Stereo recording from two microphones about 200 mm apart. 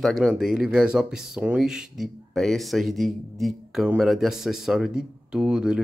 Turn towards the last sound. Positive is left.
turn(degrees=-5)  # may be behind; listen again after turning